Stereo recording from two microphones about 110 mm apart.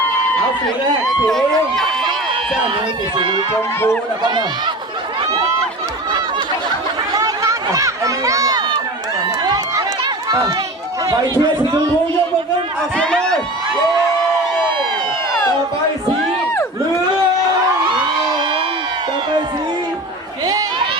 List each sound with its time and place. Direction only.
1.0 s speech: 5° left (ahead or behind)
3.2 s speech: 45° right (ahead or behind)
7.1 s run: 30° right (ahead or behind)
11.3 s speech: 35° right (ahead or behind)
13.0 s speech: 5° left (ahead or behind)
20.4 s a sound: 35° right (ahead or behind)